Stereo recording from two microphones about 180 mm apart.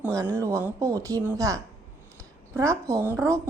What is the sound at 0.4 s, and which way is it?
Speech, 15° right (ahead or behind).